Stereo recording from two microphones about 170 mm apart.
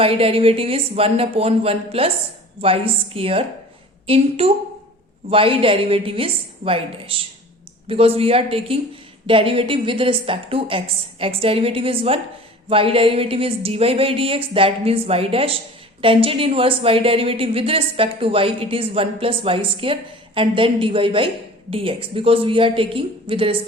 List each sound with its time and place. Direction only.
0.0 s a woman's voice: 35° right (ahead or behind)